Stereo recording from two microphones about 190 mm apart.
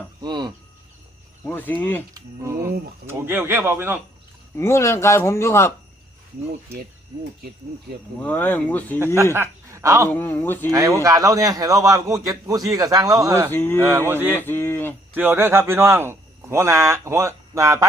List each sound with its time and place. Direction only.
0.2 s cricket: 20° right (ahead or behind)
1.5 s speech: 10° left (ahead or behind)
2.1 s a man's voice: 15° right (ahead or behind)
4.5 s speech: 15° left (ahead or behind)
8.2 s speech: 10° left (ahead or behind)
9.3 s speech: 15° right (ahead or behind)
10.1 s speech: 10° left (ahead or behind)
10.7 s a man's voice: 15° right (ahead or behind)
13.5 s speech: 10° left (ahead or behind)
14.1 s a man's voice: 10° right (ahead or behind)
14.3 s speech: 10° left (ahead or behind)
15.1 s a man's voice: 10° right (ahead or behind)